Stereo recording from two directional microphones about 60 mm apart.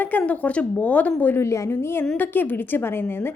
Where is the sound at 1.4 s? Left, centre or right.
Left.